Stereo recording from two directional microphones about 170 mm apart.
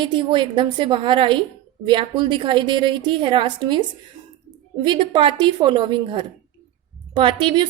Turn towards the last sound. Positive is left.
turn(degrees=-30)  # may be behind; listen again after turning